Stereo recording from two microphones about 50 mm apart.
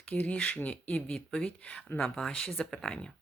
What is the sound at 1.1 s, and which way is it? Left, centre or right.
Speech, centre.